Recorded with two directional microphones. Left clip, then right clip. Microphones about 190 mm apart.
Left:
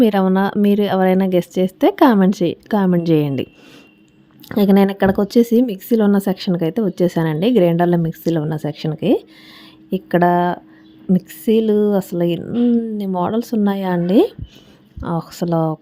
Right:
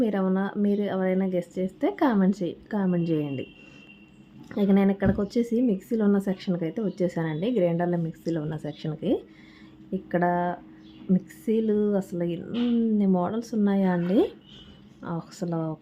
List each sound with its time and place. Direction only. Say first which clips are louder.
0.0 s speech: left 11 dB; 50° left (ahead or behind)
4.4 s speech: left 9 dB; 50° left (ahead or behind)